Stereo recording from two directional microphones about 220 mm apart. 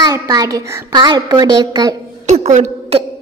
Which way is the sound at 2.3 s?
35° right (ahead or behind).